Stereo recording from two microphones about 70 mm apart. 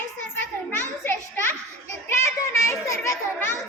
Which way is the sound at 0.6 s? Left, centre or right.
Left.